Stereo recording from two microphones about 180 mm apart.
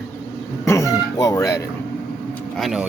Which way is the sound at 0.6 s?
15° left (ahead or behind).